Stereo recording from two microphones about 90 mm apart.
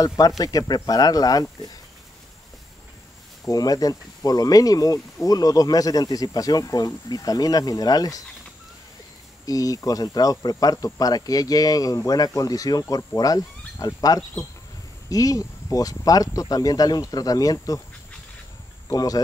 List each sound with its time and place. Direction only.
0.4 s speech: 45° left (ahead or behind)
3.4 s speech: 45° left (ahead or behind)
9.5 s speech: 40° left (ahead or behind)
18.9 s speech: 45° left (ahead or behind)